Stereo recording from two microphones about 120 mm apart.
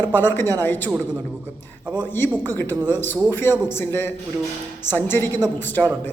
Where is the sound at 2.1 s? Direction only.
20° left (ahead or behind).